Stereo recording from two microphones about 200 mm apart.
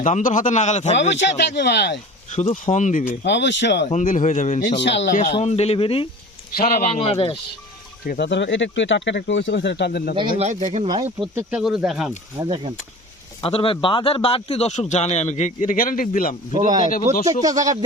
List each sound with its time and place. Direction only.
0.0 s a man's voice: 40° left (ahead or behind)
1.1 s speech: 60° left (ahead or behind)
2.3 s a man's voice: 35° left (ahead or behind)
3.2 s speech: 60° left (ahead or behind)
3.8 s a man's voice: 40° left (ahead or behind)
4.8 s speech: 60° left (ahead or behind)
5.1 s a man's voice: 35° left (ahead or behind)
6.6 s a man's voice: 50° left (ahead or behind)
6.8 s speech: 30° left (ahead or behind)
8.0 s speech: 50° left (ahead or behind)
10.2 s speech: 25° right (ahead or behind)
11.3 s speech: 5° right (ahead or behind)
13.4 s a man's voice: 25° left (ahead or behind); by 16.3 s 45° left (ahead or behind)
17.1 s speech: 15° right (ahead or behind)